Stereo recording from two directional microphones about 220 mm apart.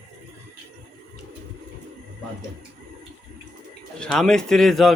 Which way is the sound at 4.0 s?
5° left (ahead or behind).